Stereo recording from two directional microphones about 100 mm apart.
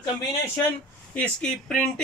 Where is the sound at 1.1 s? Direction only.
10° left (ahead or behind).